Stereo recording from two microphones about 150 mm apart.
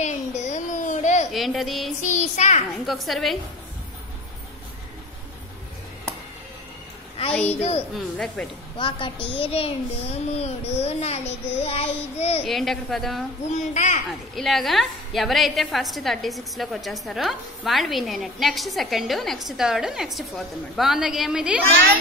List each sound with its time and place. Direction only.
0.0 s a sound: 50° left (ahead or behind)
1.3 s a woman's voice: centre (ahead or behind)
2.0 s a child's voice: 50° left (ahead or behind)
2.8 s a woman's voice: centre (ahead or behind)
7.9 s a woman's voice: 5° left (ahead or behind)
8.7 s a child's voice: 35° left (ahead or behind)
12.4 s a woman's voice: centre (ahead or behind)
13.5 s a child's voice: 55° left (ahead or behind)
14.0 s a woman's voice: centre (ahead or behind)